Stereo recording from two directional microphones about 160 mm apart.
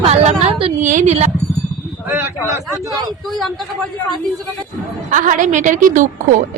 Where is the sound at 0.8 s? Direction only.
50° right (ahead or behind).